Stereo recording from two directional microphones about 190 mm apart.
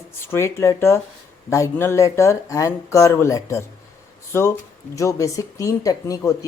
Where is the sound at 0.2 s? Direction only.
15° left (ahead or behind).